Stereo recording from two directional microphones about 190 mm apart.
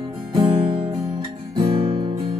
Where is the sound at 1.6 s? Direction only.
30° right (ahead or behind).